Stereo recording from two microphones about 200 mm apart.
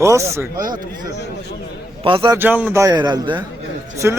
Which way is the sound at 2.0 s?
25° right (ahead or behind).